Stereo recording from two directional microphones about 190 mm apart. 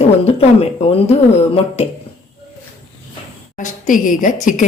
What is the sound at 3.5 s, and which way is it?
A woman's voice, 45° left (ahead or behind).